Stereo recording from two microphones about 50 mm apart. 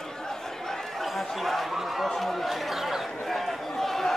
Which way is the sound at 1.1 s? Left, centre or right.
Centre.